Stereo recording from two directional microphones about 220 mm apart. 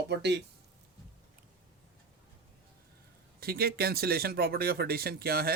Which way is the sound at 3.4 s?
45° right (ahead or behind).